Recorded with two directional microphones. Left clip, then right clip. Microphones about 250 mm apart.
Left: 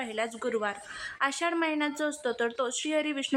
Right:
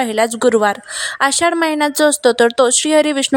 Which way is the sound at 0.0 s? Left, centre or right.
Right.